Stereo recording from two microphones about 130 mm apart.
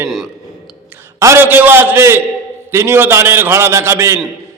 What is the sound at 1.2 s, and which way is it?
A man's voice, 20° right (ahead or behind).